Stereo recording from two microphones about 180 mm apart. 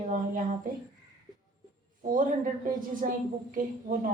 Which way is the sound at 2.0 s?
50° right (ahead or behind).